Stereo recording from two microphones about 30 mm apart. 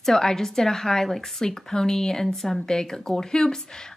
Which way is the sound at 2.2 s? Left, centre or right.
Centre.